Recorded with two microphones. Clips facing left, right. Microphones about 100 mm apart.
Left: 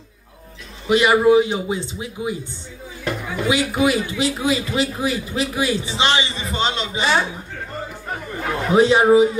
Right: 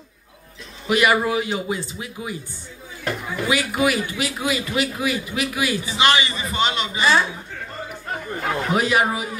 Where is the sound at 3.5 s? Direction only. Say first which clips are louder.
Left 2 dB; 25° left (ahead or behind).